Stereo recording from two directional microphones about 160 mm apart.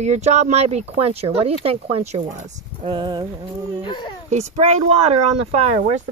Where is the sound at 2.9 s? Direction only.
30° right (ahead or behind).